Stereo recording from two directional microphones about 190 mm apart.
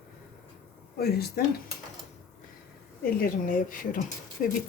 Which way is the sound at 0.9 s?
55° left (ahead or behind).